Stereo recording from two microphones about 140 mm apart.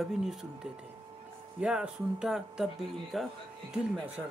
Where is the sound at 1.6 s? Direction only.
5° right (ahead or behind).